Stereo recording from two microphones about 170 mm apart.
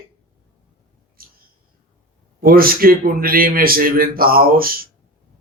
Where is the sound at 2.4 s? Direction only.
60° right (ahead or behind).